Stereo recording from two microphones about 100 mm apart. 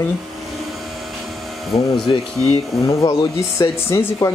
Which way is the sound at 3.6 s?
30° left (ahead or behind).